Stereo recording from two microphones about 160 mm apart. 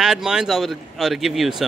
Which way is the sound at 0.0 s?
5° right (ahead or behind).